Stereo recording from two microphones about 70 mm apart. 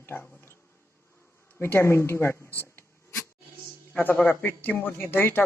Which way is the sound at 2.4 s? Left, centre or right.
Left.